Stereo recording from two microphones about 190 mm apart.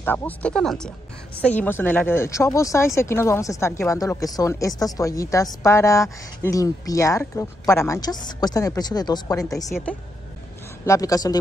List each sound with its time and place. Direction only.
0.0 s a woman's voice: 10° left (ahead or behind)
9.7 s speech: centre (ahead or behind)
10.9 s a woman's voice: 20° left (ahead or behind)